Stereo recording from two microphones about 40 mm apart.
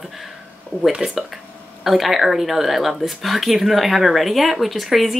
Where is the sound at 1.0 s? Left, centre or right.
Right.